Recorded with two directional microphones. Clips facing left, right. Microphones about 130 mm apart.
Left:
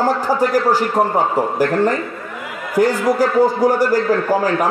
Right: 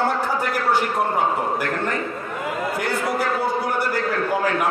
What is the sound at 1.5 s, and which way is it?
A man's voice, 35° left (ahead or behind).